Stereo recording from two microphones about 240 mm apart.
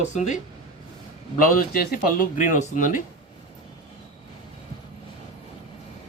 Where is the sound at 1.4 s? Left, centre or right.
Left.